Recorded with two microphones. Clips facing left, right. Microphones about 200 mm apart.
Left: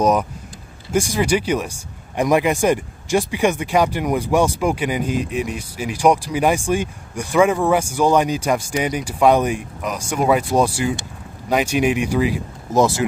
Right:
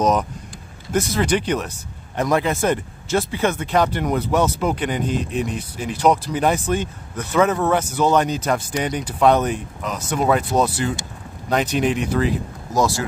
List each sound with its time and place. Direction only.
0.0 s speech: 10° left (ahead or behind)
12.7 s speech: 20° left (ahead or behind)